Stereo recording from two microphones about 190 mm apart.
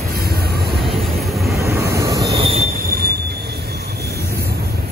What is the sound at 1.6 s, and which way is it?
Vehicle, 15° right (ahead or behind).